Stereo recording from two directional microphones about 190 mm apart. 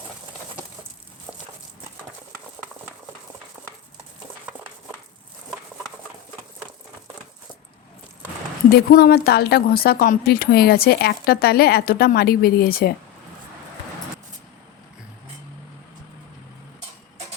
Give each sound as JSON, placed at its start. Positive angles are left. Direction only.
{"t": 8.9, "sound": "speech", "side_deg": 55}